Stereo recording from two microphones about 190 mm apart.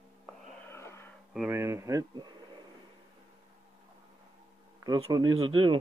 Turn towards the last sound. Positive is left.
turn(degrees=-25)  # may be behind; listen again after turning